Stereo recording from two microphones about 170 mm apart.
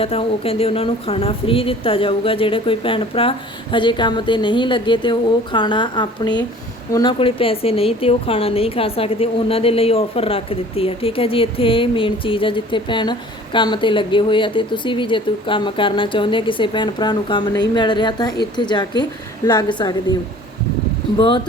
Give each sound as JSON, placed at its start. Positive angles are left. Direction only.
{"t": 0.0, "sound": "a woman's voice", "side_deg": 35}
{"t": 21.2, "sound": "a woman's voice", "side_deg": 30}